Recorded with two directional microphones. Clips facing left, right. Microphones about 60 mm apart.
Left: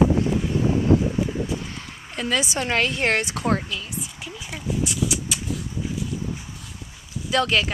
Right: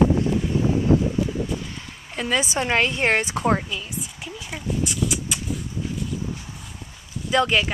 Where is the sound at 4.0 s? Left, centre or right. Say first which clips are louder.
Even; centre.